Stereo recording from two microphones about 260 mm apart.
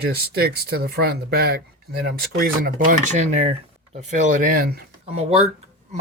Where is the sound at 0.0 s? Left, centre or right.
Right.